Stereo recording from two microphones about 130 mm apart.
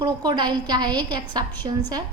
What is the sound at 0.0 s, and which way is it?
A woman's voice, 35° right (ahead or behind).